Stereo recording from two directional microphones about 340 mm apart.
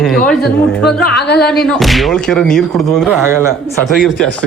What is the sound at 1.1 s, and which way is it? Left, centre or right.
Speech, left.